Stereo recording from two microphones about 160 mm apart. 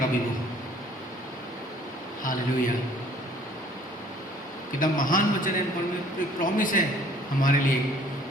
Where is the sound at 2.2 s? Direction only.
60° left (ahead or behind).